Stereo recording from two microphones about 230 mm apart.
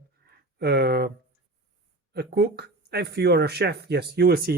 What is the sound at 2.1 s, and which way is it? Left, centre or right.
Speech, right.